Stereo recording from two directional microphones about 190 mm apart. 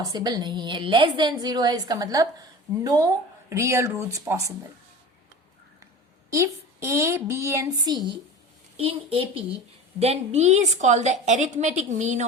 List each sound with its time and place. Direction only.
0.0 s a woman's voice: 20° right (ahead or behind)
6.3 s a woman's voice: 15° right (ahead or behind); by 12.2 s 40° right (ahead or behind)